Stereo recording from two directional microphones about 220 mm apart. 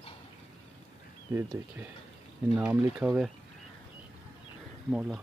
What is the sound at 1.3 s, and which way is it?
Speech, 10° right (ahead or behind).